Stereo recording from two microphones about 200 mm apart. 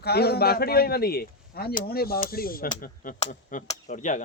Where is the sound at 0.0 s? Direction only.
55° left (ahead or behind).